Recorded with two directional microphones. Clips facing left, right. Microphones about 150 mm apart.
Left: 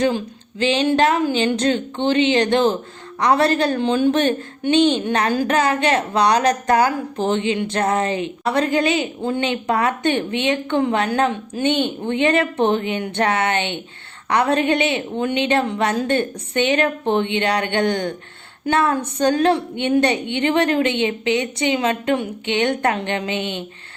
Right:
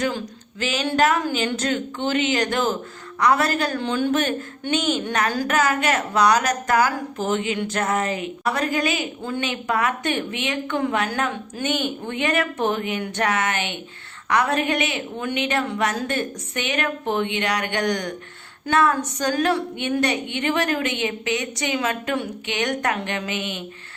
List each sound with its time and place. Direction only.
0.6 s a woman's voice: 30° left (ahead or behind)